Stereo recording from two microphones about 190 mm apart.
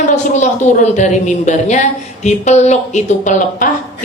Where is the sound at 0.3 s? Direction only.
40° left (ahead or behind).